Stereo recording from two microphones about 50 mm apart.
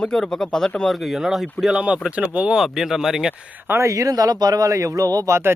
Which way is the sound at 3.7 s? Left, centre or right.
Right.